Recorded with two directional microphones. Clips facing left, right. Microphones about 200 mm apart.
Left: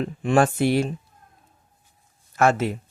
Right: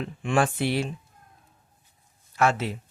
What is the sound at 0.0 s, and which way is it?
Speech, 40° left (ahead or behind).